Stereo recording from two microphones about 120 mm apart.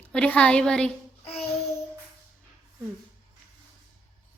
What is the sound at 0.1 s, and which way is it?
Speech, 10° left (ahead or behind).